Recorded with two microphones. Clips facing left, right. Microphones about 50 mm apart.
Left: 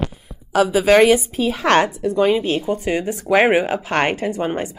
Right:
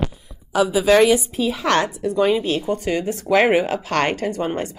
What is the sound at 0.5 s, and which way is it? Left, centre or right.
Speech, left.